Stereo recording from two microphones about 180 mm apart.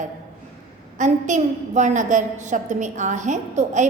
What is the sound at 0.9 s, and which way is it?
A woman's voice, 40° right (ahead or behind).